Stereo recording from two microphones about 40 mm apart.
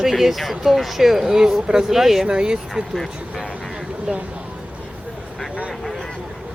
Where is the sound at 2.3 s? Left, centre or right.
Right.